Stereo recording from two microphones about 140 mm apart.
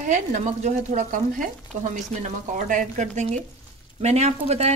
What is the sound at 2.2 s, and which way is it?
Speech, 65° right (ahead or behind).